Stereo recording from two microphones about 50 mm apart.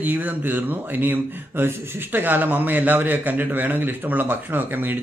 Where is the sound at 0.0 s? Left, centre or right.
Right.